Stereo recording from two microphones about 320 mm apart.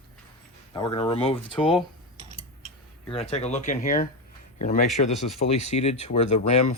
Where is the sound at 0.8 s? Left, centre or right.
Centre.